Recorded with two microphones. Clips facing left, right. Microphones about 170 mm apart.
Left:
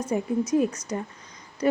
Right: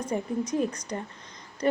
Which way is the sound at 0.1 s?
10° left (ahead or behind).